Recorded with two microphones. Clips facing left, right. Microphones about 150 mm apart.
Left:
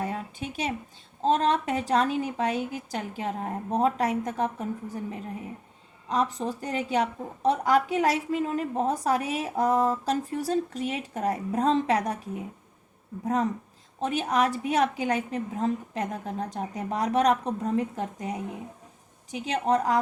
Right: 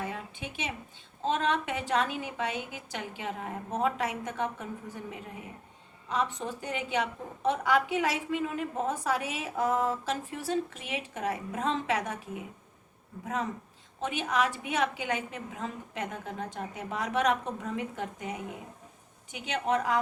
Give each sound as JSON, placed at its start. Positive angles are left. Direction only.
{"t": 0.0, "sound": "a sound", "side_deg": 40}
{"t": 1.2, "sound": "a woman's voice", "side_deg": 35}
{"t": 6.1, "sound": "a woman's voice", "side_deg": 40}
{"t": 13.2, "sound": "a woman's voice", "side_deg": 40}